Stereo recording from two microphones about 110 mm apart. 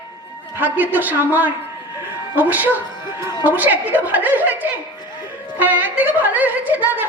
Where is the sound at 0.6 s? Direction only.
15° right (ahead or behind).